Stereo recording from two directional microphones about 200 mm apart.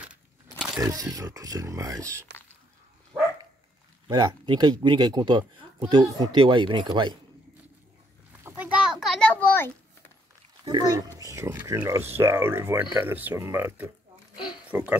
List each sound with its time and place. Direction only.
0.0 s crumpling: 5° right (ahead or behind)
0.7 s speech: 20° right (ahead or behind)
4.1 s speech: 20° right (ahead or behind)
8.5 s a sound: 10° right (ahead or behind); by 10.1 s 10° left (ahead or behind)
10.6 s speech: 20° right (ahead or behind)